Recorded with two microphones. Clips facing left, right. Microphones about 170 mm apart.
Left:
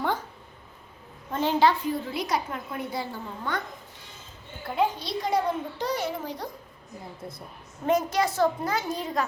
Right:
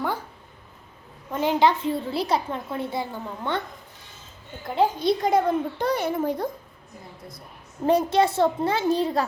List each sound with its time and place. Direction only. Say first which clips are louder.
1.3 s a woman's voice: right 2 dB; 15° right (ahead or behind)
4.9 s a child's voice: right 6 dB; 50° right (ahead or behind)
7.9 s a woman's voice: right 4 dB; 30° right (ahead or behind)